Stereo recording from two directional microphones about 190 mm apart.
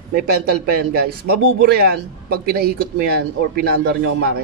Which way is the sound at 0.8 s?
55° right (ahead or behind).